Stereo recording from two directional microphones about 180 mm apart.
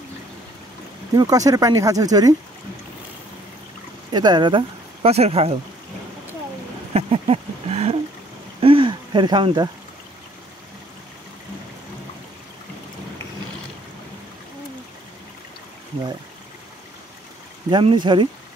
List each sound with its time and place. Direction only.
1.1 s speech: 20° right (ahead or behind)
4.1 s speech: 25° right (ahead or behind)
6.9 s a sound: 35° right (ahead or behind)
17.6 s speech: 25° right (ahead or behind)